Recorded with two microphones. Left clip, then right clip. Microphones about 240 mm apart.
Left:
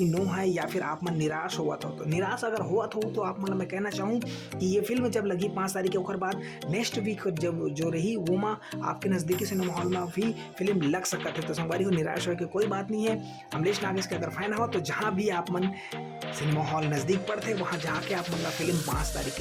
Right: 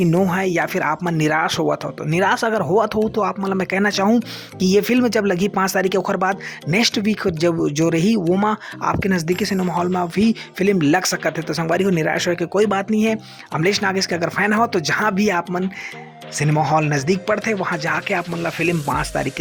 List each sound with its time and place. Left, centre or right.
0.3 s speech: right